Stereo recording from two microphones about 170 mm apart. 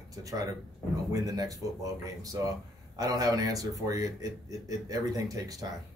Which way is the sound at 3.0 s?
20° right (ahead or behind).